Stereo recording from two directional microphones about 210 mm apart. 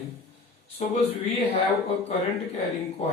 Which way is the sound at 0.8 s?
30° left (ahead or behind).